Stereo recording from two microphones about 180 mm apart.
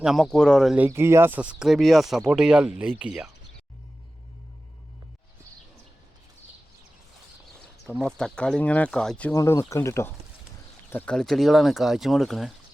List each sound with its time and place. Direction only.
0.0 s speech: centre (ahead or behind)
0.9 s speech: 15° right (ahead or behind)
7.9 s speech: 5° left (ahead or behind)
9.3 s speech: 15° left (ahead or behind); by 12.5 s centre (ahead or behind)